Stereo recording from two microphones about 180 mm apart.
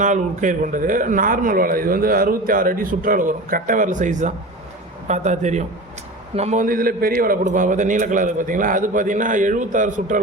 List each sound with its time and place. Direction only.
0.0 s a man's voice: 45° right (ahead or behind)